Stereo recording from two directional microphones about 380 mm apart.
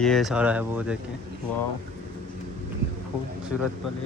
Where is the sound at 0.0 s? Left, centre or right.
Centre.